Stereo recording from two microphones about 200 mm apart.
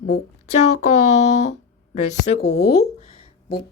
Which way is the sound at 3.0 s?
30° left (ahead or behind).